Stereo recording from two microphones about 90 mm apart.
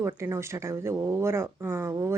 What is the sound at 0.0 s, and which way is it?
Speech, 30° right (ahead or behind).